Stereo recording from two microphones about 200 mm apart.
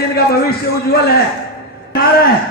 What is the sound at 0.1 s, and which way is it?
A man's voice, 50° left (ahead or behind).